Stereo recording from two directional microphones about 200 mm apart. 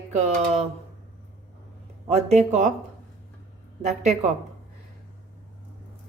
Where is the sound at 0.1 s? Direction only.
35° right (ahead or behind).